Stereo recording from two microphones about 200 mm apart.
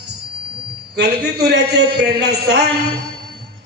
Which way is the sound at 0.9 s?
55° right (ahead or behind).